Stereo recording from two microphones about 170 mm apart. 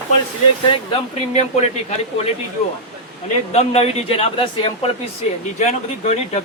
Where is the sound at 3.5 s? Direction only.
35° left (ahead or behind).